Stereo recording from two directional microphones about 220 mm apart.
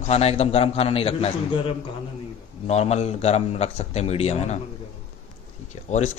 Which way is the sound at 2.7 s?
30° left (ahead or behind).